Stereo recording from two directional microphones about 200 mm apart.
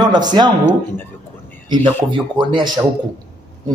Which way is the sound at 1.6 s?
25° right (ahead or behind).